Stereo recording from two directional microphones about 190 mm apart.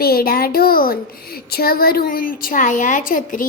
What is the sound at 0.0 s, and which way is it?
Speech, 50° left (ahead or behind).